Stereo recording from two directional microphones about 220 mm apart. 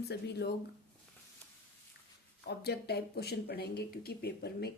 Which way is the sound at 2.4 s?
45° left (ahead or behind).